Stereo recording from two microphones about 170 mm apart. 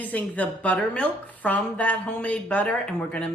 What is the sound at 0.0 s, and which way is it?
A woman's voice, 10° left (ahead or behind).